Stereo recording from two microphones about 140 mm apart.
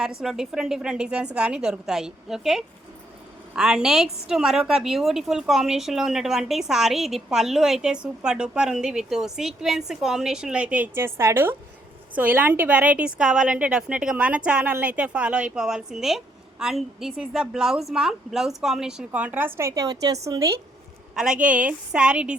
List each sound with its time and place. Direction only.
0.0 s a woman's voice: 5° right (ahead or behind); by 20.6 s 25° right (ahead or behind)
21.2 s a woman's voice: 5° right (ahead or behind)